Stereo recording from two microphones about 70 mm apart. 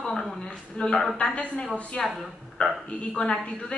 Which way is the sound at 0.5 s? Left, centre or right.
Centre.